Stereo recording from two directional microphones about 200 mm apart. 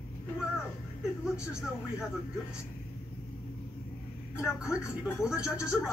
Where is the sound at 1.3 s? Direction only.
5° right (ahead or behind).